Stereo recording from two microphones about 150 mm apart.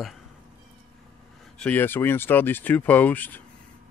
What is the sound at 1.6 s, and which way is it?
Speech, 10° left (ahead or behind).